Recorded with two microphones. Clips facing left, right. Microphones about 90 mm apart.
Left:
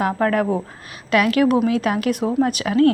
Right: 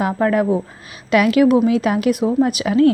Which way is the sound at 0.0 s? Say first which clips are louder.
Right 2 dB; 15° right (ahead or behind).